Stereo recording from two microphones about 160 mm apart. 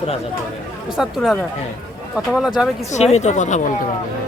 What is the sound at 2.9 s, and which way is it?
Speech, 45° left (ahead or behind).